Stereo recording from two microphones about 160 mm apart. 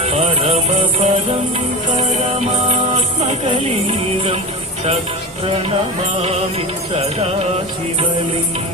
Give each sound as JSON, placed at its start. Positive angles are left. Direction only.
{"t": 0.0, "sound": "music", "side_deg": -40}
{"t": 6.9, "sound": "music", "side_deg": -40}